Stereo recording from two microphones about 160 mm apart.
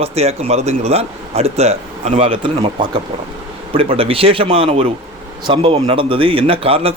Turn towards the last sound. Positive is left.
turn(degrees=-35)  # may be behind; listen again after turning